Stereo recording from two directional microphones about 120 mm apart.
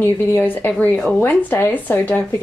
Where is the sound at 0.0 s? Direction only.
15° left (ahead or behind).